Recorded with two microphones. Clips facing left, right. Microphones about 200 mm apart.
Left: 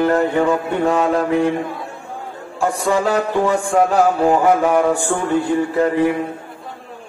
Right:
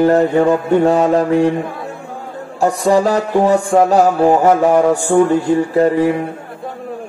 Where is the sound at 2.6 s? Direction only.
40° right (ahead or behind).